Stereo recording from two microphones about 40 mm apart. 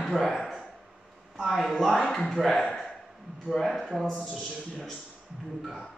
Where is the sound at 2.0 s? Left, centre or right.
Centre.